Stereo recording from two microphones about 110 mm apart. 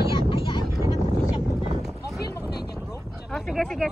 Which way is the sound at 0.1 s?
45° left (ahead or behind).